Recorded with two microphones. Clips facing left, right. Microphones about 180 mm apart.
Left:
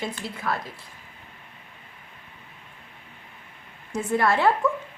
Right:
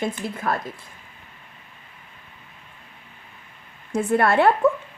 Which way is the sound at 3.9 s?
60° right (ahead or behind).